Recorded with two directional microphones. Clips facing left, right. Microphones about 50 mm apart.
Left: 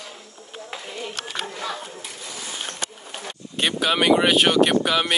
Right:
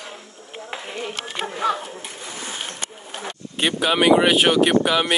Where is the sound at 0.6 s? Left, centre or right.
Right.